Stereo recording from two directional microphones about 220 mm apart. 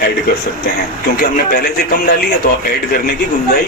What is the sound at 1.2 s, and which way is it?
Speech, 45° left (ahead or behind).